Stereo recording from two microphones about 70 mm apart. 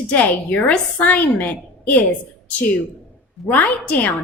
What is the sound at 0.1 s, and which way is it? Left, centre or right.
Speech, left.